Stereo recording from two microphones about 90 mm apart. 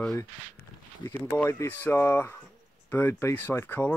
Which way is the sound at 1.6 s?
20° left (ahead or behind).